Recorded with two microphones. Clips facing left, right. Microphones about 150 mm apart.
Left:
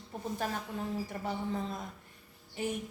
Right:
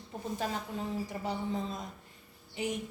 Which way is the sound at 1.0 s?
20° right (ahead or behind).